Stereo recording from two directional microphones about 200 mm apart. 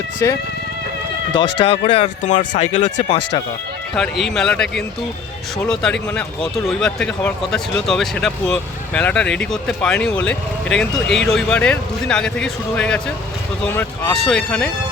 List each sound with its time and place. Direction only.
0.2 s speech: 15° left (ahead or behind)
1.3 s speech: 25° left (ahead or behind)
2.7 s speech: 20° left (ahead or behind)
3.9 s speech: centre (ahead or behind)